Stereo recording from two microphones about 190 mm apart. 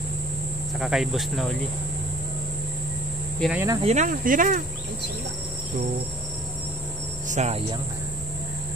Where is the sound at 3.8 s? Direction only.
35° right (ahead or behind).